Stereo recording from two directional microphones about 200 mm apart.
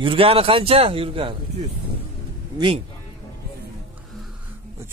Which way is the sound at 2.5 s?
25° right (ahead or behind).